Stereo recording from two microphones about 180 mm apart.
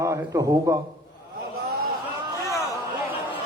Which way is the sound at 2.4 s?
15° left (ahead or behind).